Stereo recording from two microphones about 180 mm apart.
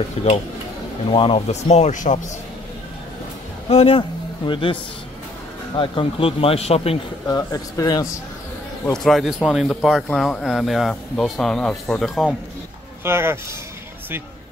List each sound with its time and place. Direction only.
0.2 s speech: 35° left (ahead or behind)
3.6 s speech: 35° left (ahead or behind)
5.8 s speech: 30° left (ahead or behind)
7.2 s speech: 20° left (ahead or behind)
8.9 s speech: centre (ahead or behind)
13.0 s speech: 15° right (ahead or behind)